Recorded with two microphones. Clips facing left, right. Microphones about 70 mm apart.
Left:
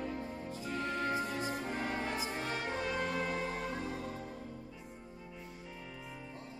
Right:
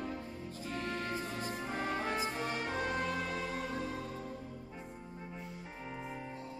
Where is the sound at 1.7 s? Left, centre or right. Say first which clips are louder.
Right 1 dB; left.